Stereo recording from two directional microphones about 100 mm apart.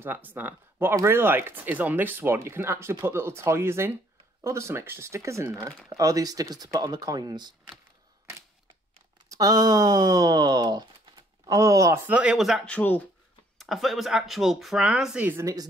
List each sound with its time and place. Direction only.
0.0 s speech: 20° right (ahead or behind); by 7.5 s 40° right (ahead or behind)
9.3 s speech: 40° right (ahead or behind)
12.1 s speech: 10° right (ahead or behind)
12.6 s speech: 15° left (ahead or behind)
13.6 s speech: centre (ahead or behind)